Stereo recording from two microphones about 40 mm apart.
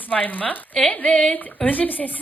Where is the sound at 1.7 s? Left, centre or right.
Left.